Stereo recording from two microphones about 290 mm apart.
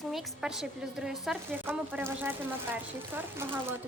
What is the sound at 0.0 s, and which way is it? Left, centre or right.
A woman's voice, centre.